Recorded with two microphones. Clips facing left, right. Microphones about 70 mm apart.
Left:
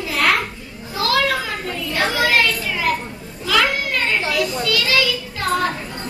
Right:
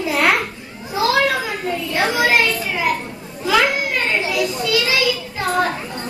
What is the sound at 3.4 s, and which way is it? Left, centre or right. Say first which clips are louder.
Children playing: right 2 dB; centre.